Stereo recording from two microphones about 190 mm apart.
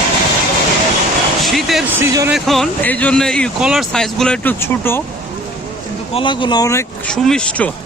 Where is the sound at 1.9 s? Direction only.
15° right (ahead or behind).